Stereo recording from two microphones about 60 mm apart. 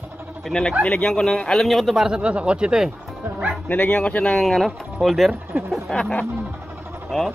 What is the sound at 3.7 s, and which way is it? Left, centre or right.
Speech, left.